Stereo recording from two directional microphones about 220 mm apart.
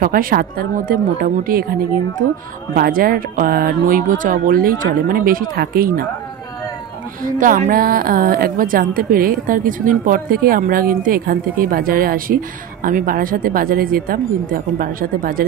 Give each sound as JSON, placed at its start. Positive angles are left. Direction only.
{"t": 0.0, "sound": "a woman's voice", "side_deg": -40}
{"t": 2.7, "sound": "a woman's voice", "side_deg": -40}
{"t": 7.2, "sound": "a woman's voice", "side_deg": -35}